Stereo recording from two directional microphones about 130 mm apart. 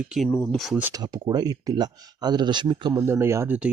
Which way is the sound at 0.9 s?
30° right (ahead or behind).